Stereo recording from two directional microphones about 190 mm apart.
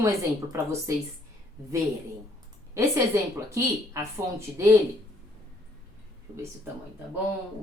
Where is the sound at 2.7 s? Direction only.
15° right (ahead or behind).